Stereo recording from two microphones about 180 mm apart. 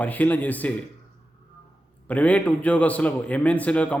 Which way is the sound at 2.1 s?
10° left (ahead or behind).